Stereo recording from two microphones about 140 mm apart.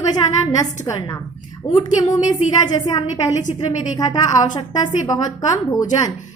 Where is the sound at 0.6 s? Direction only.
25° left (ahead or behind).